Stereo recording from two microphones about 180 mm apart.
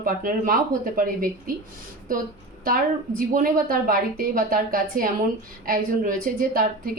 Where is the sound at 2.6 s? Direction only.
55° right (ahead or behind).